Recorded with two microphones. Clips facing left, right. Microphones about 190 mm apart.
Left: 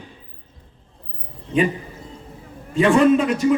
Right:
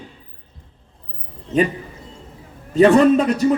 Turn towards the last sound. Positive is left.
turn(degrees=-40)  # may be behind; listen again after turning